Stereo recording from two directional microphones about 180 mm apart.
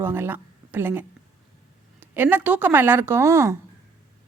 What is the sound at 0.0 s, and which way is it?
Speech, 10° right (ahead or behind).